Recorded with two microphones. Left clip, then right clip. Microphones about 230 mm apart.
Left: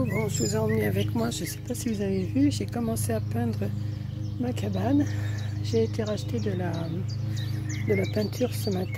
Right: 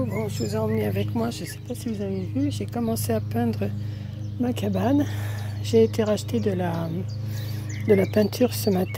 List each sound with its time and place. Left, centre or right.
0.1 s speech: centre
2.7 s speech: right
7.9 s speech: right